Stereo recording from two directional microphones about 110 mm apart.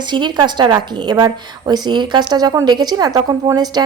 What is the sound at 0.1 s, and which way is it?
A woman's voice, 45° right (ahead or behind).